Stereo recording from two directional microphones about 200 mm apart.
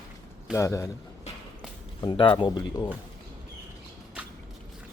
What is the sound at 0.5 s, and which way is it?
Speech, 15° left (ahead or behind).